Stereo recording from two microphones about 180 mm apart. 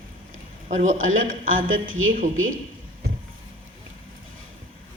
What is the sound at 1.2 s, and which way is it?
Speech, 50° right (ahead or behind).